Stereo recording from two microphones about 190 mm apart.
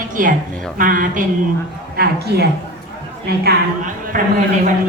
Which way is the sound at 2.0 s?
60° right (ahead or behind).